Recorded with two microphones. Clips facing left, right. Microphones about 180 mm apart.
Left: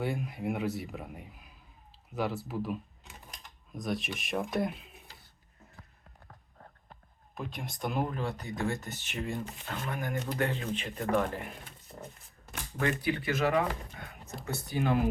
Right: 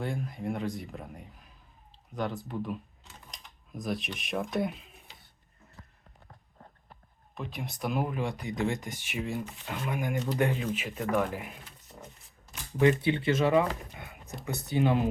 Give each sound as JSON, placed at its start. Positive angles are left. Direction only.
{"t": 0.0, "sound": "speech", "side_deg": 5}
{"t": 7.3, "sound": "speech", "side_deg": 0}
{"t": 12.8, "sound": "speech", "side_deg": -25}